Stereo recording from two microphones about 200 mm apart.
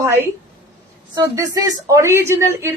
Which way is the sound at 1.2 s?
15° right (ahead or behind).